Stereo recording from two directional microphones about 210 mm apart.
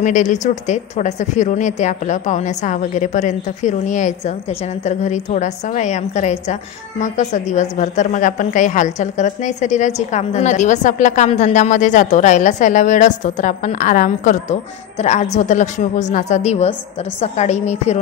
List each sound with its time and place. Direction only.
0.0 s a woman's voice: 35° left (ahead or behind)